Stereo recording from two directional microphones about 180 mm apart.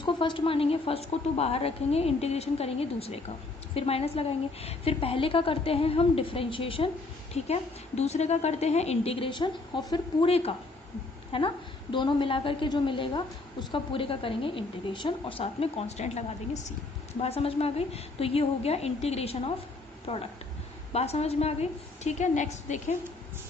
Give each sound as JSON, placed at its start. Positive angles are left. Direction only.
{"t": 0.0, "sound": "a woman's voice", "side_deg": 25}